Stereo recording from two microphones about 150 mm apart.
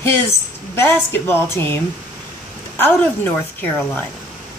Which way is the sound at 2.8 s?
15° left (ahead or behind).